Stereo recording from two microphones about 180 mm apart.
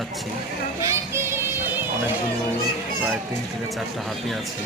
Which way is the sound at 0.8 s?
15° right (ahead or behind).